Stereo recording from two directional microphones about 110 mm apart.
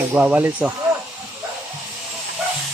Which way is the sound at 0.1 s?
15° right (ahead or behind).